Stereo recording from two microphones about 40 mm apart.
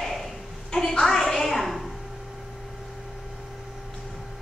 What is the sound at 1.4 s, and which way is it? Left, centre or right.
Speech, centre.